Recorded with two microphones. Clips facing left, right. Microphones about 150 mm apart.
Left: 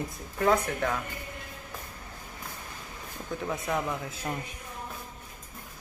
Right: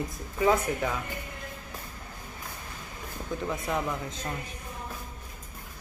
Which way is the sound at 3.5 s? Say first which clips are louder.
Left 1 dB; centre (ahead or behind).